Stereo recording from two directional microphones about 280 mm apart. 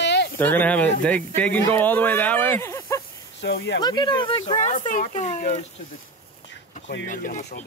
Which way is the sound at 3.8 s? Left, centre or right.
Centre.